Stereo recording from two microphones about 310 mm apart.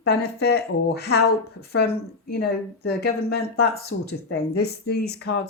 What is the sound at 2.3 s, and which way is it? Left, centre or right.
Speech, left.